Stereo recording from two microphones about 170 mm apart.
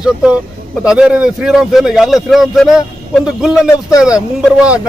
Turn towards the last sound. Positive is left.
turn(degrees=-5)  # may be behind; listen again after turning